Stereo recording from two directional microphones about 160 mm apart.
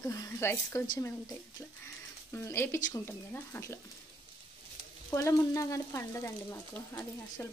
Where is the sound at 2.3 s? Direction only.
15° left (ahead or behind).